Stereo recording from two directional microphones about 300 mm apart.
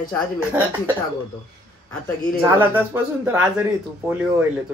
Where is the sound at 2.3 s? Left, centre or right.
Centre.